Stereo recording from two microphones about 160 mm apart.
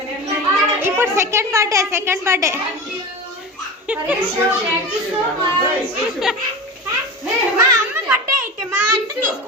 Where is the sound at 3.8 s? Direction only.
10° right (ahead or behind).